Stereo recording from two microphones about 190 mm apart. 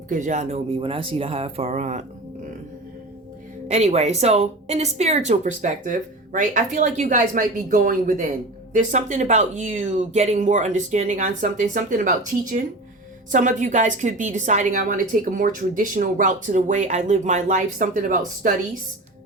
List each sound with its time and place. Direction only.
0.1 s a woman's voice: 40° right (ahead or behind)
3.7 s a woman's voice: 35° right (ahead or behind)